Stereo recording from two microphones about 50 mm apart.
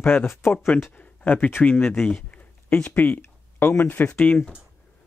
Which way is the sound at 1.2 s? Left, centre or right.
Left.